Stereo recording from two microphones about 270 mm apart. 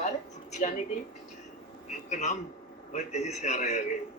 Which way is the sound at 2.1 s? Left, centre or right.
Left.